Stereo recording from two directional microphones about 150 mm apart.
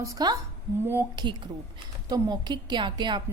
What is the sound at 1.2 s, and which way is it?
A woman's voice, 30° right (ahead or behind).